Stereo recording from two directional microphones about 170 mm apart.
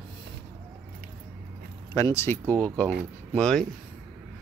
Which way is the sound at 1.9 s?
15° left (ahead or behind).